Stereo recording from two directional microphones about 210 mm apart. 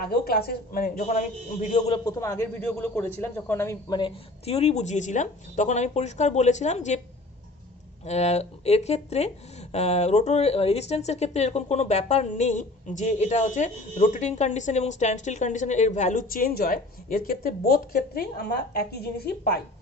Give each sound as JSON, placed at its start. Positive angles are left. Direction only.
{"t": 0.0, "sound": "speech", "side_deg": 45}
{"t": 2.0, "sound": "a man's voice", "side_deg": 15}
{"t": 2.6, "sound": "speech", "side_deg": 5}
{"t": 8.0, "sound": "a woman's voice", "side_deg": 30}